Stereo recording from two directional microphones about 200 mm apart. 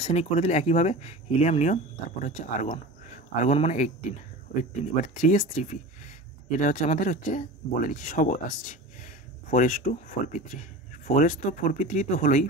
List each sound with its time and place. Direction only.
0.0 s speech: 35° left (ahead or behind)
5.0 s speech: 40° left (ahead or behind)